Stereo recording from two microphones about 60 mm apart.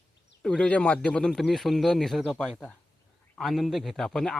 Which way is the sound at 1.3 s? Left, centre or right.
Centre.